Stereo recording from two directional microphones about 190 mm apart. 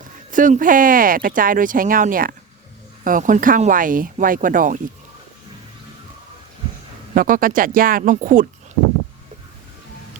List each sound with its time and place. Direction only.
0.3 s speech: 45° right (ahead or behind)
7.1 s speech: 45° right (ahead or behind)